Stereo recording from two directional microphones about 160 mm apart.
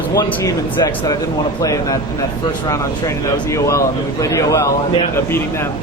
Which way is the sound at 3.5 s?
20° left (ahead or behind).